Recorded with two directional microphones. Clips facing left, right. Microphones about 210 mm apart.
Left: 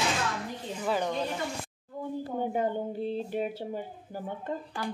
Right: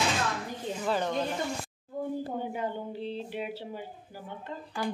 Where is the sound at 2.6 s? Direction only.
45° left (ahead or behind).